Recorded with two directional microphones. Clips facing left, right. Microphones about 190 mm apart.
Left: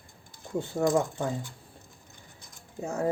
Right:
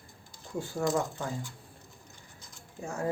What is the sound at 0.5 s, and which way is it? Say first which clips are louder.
Speech: left 4 dB; 20° left (ahead or behind).